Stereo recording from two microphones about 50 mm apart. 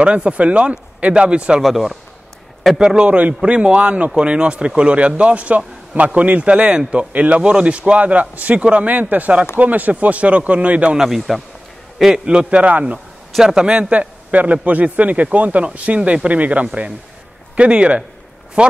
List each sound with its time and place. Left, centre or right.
0.0 s a man's voice: right
1.6 s speech: centre
2.8 s a man's voice: centre
11.1 s speech: centre
12.0 s a man's voice: centre
13.4 s a man's voice: centre